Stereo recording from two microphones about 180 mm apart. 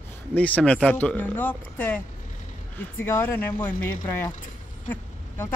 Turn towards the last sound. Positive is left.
turn(degrees=10)  # may be behind; listen again after turning